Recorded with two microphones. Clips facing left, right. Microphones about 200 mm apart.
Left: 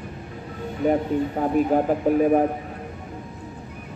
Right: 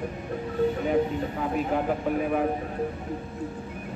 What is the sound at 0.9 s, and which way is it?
A man's voice, 40° left (ahead or behind).